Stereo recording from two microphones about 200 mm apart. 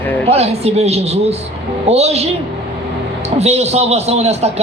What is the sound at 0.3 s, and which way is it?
A man's voice, 30° right (ahead or behind).